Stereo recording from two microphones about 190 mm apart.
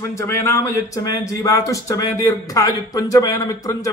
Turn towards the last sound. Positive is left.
turn(degrees=15)  # may be behind; listen again after turning